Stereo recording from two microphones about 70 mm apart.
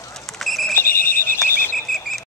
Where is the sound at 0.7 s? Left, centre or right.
Left.